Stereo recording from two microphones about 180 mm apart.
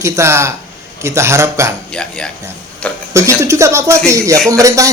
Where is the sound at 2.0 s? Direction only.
5° left (ahead or behind).